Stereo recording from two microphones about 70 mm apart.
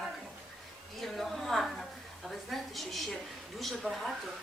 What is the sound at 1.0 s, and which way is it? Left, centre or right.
A woman's voice, centre.